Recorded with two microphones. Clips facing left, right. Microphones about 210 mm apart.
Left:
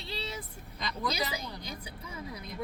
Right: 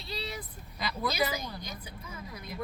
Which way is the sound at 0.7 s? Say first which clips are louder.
Right 2 dB; 5° right (ahead or behind).